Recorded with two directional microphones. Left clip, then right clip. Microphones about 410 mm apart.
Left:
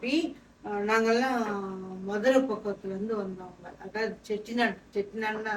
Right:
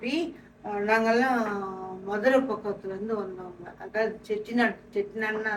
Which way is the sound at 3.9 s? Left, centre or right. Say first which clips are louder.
Right 4 dB; centre.